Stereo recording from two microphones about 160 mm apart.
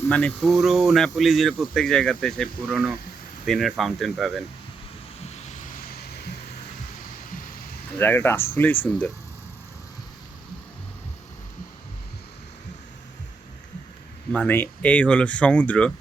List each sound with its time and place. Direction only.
0.0 s speech: 10° left (ahead or behind)
5.2 s vehicle: 45° left (ahead or behind); by 6.3 s 75° left (ahead or behind)
7.9 s speech: 15° left (ahead or behind)
14.3 s speech: 10° left (ahead or behind)